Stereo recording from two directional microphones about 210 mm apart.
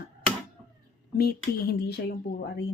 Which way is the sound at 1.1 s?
45° left (ahead or behind).